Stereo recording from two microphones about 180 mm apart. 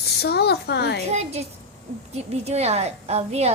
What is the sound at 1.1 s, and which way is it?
A woman's voice, 35° right (ahead or behind).